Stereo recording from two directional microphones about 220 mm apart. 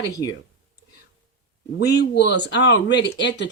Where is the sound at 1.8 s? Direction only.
50° left (ahead or behind).